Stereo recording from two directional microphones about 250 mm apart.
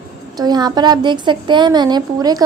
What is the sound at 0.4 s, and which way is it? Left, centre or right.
A woman's voice, centre.